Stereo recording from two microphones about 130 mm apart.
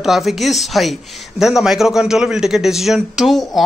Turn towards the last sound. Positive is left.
turn(degrees=0)  # may be behind; listen again after turning